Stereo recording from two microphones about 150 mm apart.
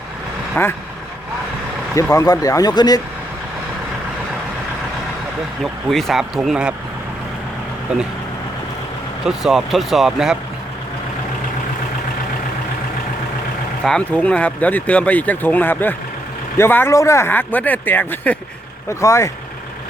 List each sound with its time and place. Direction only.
0.6 s speech: 10° left (ahead or behind)
2.0 s speech: 20° left (ahead or behind)
5.6 s speech: centre (ahead or behind)
7.9 s speech: 5° right (ahead or behind)
9.2 s speech: 5° right (ahead or behind)
13.8 s speech: 5° left (ahead or behind)